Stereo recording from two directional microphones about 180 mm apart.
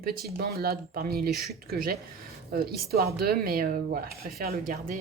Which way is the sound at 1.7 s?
55° right (ahead or behind).